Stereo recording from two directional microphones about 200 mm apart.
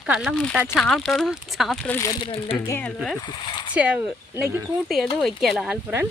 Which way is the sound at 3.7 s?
5° right (ahead or behind).